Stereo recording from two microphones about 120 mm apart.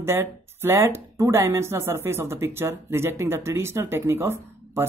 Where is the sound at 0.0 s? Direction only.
20° right (ahead or behind).